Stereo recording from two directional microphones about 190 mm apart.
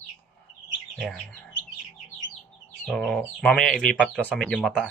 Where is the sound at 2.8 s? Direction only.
Centre (ahead or behind).